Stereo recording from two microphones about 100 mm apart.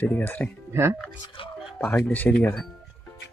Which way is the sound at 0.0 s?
20° left (ahead or behind).